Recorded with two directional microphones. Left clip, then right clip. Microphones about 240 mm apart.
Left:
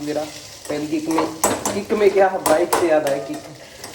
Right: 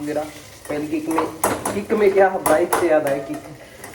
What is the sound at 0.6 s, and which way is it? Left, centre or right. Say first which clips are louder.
Speech: left 1 dB; left.